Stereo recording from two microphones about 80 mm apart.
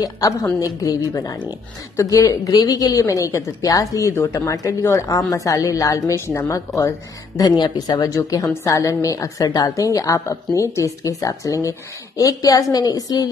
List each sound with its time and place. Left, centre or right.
0.0 s a woman's voice: left
5.0 s a woman's voice: left
7.3 s a woman's voice: left